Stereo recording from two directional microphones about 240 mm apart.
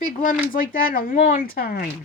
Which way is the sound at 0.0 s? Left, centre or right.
Left.